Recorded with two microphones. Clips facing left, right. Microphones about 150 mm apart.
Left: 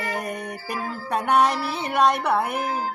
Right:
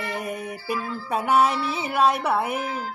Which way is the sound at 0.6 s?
40° left (ahead or behind).